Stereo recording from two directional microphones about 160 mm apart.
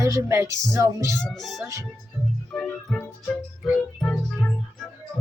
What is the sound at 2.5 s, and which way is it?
Music, 5° left (ahead or behind).